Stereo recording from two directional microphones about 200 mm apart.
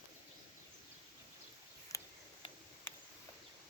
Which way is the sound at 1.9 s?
15° left (ahead or behind).